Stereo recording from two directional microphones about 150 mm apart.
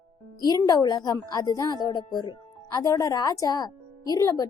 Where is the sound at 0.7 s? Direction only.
25° left (ahead or behind).